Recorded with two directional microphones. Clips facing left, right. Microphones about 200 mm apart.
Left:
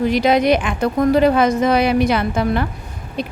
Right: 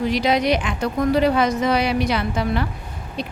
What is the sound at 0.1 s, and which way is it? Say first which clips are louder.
Speech: left 4 dB; 50° left (ahead or behind).